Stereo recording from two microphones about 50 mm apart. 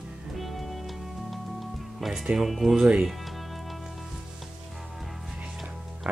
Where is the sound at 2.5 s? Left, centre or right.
Centre.